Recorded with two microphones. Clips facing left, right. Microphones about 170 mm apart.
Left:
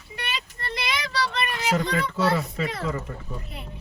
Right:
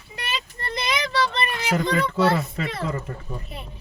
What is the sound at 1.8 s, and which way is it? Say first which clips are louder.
Speech: right 3 dB; 35° left (ahead or behind).